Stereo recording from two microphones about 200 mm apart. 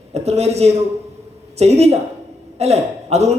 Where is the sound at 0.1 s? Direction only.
30° right (ahead or behind).